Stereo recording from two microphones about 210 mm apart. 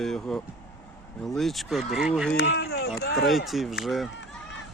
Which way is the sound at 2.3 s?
50° left (ahead or behind).